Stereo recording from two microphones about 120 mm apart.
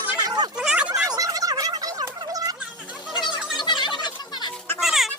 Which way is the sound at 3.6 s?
40° left (ahead or behind).